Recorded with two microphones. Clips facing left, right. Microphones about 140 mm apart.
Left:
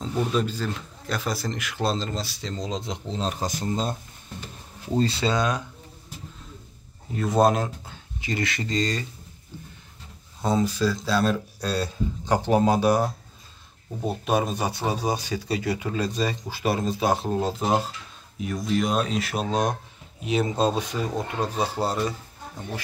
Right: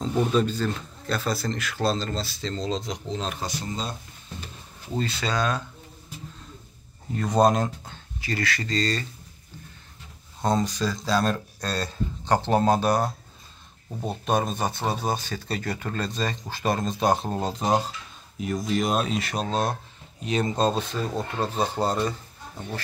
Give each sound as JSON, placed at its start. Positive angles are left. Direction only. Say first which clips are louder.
{"t": 0.0, "sound": "speech", "louder": "right 2 dB", "side_deg": 0}
{"t": 3.4, "sound": "speech", "louder": "left 4 dB", "side_deg": 45}
{"t": 4.9, "sound": "speech", "louder": "left 4 dB", "side_deg": 30}
{"t": 7.2, "sound": "speech", "louder": "even", "side_deg": 5}
{"t": 8.2, "sound": "speech", "louder": "left 1 dB", "side_deg": 20}
{"t": 10.4, "sound": "speech", "louder": "left 1 dB", "side_deg": 5}